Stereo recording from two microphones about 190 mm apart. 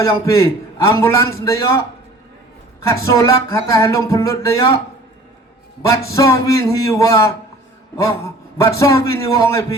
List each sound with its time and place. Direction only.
0.0 s speech: 15° left (ahead or behind)
2.9 s speech: 15° left (ahead or behind)
6.1 s speech: 15° left (ahead or behind)